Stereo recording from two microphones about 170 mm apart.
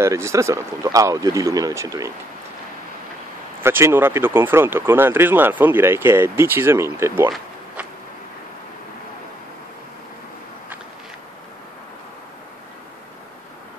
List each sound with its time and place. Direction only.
0.0 s speech: 15° right (ahead or behind)
3.6 s speech: 15° right (ahead or behind)